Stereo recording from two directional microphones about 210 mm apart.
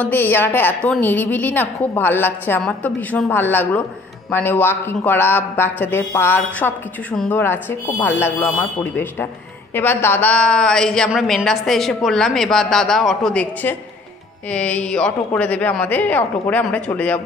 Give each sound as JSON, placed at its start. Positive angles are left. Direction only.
{"t": 0.0, "sound": "a woman's voice", "side_deg": 10}